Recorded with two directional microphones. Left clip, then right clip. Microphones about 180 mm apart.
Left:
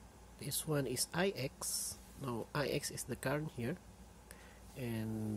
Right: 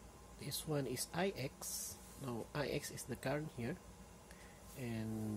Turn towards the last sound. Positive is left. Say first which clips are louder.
# left 3 dB
turn(degrees=20)  # may be behind; listen again after turning